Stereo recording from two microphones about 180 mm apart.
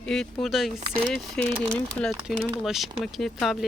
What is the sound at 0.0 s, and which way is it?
Speech, centre (ahead or behind).